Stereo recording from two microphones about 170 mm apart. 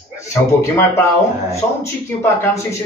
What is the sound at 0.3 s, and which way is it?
Speech, 15° left (ahead or behind).